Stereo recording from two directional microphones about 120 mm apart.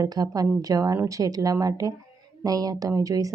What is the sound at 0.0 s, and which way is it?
Speech, 30° right (ahead or behind).